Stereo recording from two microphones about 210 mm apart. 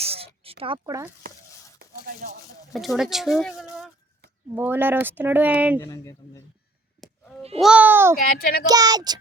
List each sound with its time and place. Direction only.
0.0 s a sound: 30° right (ahead or behind)
1.8 s a sound: 45° right (ahead or behind)
2.7 s speech: centre (ahead or behind)
5.8 s speech: 15° left (ahead or behind)
7.6 s speech: 5° right (ahead or behind)
8.2 s a child's voice: 45° left (ahead or behind)
8.6 s speech: 20° right (ahead or behind)